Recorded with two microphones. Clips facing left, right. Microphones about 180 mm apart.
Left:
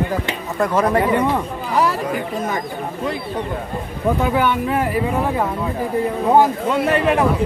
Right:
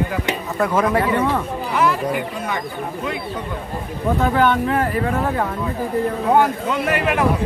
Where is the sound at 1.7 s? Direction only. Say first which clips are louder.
Even; 40° left (ahead or behind).